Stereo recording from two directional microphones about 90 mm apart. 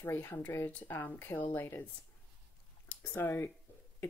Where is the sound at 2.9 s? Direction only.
25° left (ahead or behind).